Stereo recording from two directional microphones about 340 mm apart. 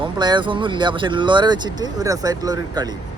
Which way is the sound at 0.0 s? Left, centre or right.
Centre.